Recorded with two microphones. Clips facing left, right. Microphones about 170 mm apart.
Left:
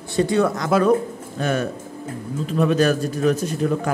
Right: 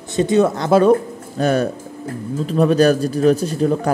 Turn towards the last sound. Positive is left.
turn(degrees=-35)  # may be behind; listen again after turning